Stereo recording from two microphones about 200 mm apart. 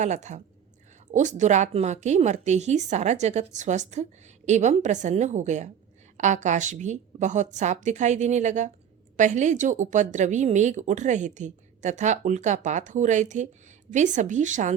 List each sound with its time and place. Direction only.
0.0 s speech: 35° right (ahead or behind)